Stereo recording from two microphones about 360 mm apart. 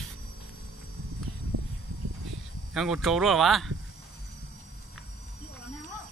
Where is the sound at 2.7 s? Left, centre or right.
Centre.